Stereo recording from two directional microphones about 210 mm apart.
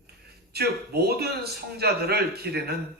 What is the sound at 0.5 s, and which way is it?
A man's voice, 50° right (ahead or behind).